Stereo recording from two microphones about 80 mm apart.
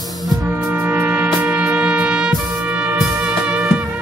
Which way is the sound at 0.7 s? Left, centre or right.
Right.